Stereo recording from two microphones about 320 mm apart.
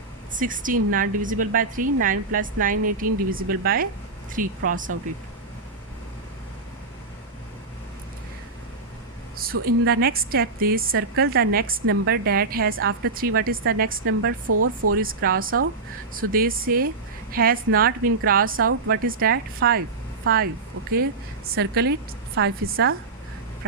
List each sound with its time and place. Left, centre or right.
0.3 s a woman's voice: right
9.3 s a woman's voice: right
14.0 s a woman's voice: right
15.0 s a woman's voice: right
21.5 s a woman's voice: right